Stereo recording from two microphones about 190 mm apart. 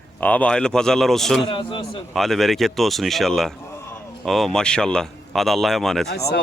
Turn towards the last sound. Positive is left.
turn(degrees=0)  # may be behind; listen again after turning